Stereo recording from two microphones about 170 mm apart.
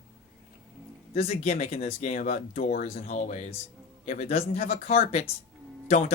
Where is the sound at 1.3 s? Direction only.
45° left (ahead or behind).